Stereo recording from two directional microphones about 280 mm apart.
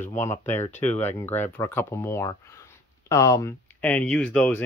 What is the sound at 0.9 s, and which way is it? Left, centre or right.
Speech, left.